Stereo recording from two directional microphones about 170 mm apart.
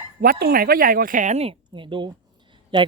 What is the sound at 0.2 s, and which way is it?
A woman's voice, 60° right (ahead or behind).